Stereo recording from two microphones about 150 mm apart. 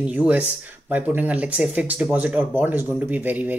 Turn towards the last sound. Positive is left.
turn(degrees=-10)  # may be behind; listen again after turning